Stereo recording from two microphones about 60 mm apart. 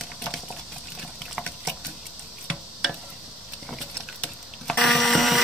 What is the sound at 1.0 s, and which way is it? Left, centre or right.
Water, centre.